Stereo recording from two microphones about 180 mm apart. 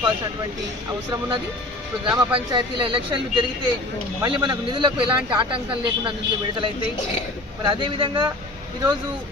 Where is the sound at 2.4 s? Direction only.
25° right (ahead or behind).